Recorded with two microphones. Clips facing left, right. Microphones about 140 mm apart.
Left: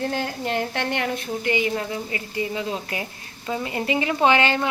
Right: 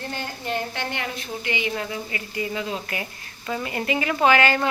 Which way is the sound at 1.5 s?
45° left (ahead or behind).